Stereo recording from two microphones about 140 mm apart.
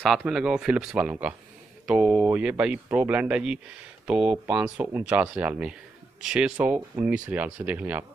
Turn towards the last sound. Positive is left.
turn(degrees=-10)  # may be behind; listen again after turning